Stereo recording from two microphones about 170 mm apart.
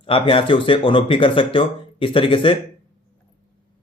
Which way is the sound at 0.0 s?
30° left (ahead or behind).